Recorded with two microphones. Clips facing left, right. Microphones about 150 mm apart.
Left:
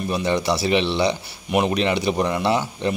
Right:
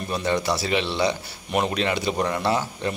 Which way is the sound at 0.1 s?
15° left (ahead or behind).